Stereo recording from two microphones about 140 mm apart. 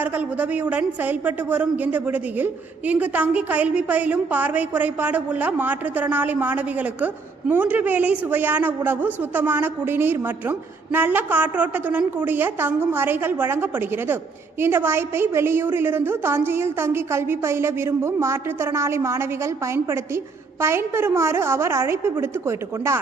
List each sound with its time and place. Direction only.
0.0 s a woman's voice: 10° right (ahead or behind)
20.6 s a woman's voice: 20° right (ahead or behind)